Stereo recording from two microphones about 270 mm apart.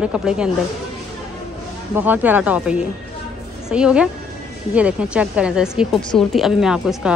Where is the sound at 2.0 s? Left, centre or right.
Centre.